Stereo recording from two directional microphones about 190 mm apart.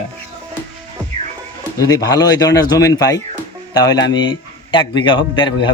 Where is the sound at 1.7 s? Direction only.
20° left (ahead or behind).